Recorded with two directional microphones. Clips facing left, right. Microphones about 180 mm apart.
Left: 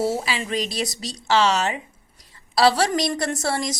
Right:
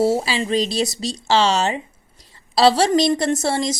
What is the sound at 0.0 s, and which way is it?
A woman's voice, 30° right (ahead or behind).